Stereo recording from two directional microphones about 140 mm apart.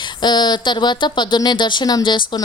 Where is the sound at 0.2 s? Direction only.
30° left (ahead or behind).